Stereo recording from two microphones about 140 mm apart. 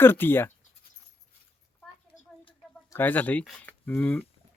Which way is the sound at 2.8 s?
15° left (ahead or behind).